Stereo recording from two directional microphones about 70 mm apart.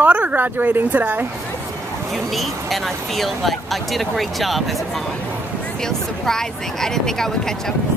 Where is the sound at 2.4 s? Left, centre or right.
Centre.